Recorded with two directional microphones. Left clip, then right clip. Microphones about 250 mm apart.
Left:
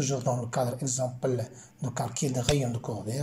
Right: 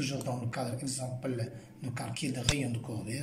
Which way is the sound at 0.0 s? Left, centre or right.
Centre.